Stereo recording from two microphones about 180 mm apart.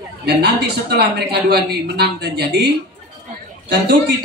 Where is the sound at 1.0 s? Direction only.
65° right (ahead or behind).